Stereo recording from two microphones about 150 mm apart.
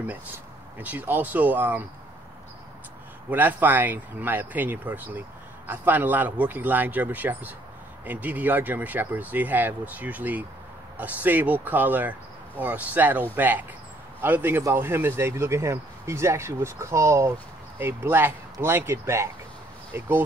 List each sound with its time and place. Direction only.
0.7 s speech: 10° right (ahead or behind)
3.3 s speech: 10° right (ahead or behind)